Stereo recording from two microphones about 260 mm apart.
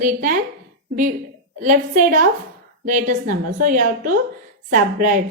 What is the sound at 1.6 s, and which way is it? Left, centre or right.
A woman's voice, right.